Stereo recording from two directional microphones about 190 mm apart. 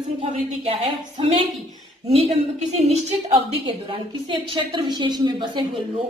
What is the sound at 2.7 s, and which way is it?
A woman's voice, 30° right (ahead or behind).